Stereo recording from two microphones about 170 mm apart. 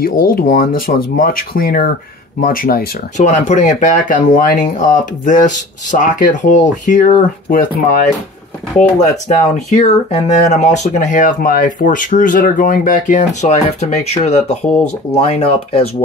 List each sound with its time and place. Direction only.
0.0 s speech: 55° left (ahead or behind)
3.2 s speech: 45° left (ahead or behind)
9.0 s speech: 45° left (ahead or behind)